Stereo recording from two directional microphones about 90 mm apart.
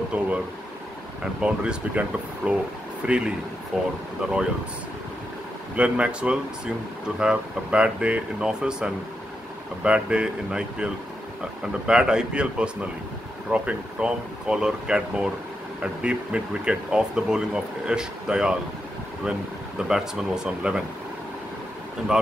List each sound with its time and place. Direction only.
0.1 s speech: 15° right (ahead or behind)
1.4 s speech: 10° right (ahead or behind)
5.8 s speech: 15° right (ahead or behind)
19.9 s speech: 10° right (ahead or behind)